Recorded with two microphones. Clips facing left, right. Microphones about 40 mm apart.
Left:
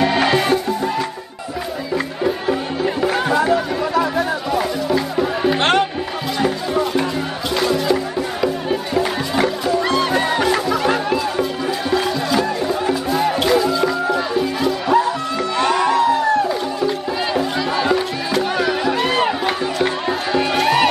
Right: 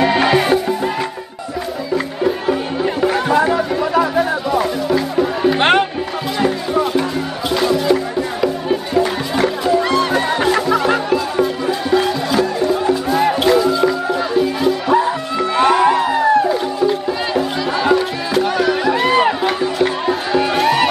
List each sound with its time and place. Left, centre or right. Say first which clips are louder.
0.0 s music: right 2 dB; centre
2.2 s music: right 2 dB; centre
5.6 s music: right 3 dB; centre
6.4 s music: right 2 dB; centre
15.0 s music: right 2 dB; centre
16.4 s music: right 4 dB; centre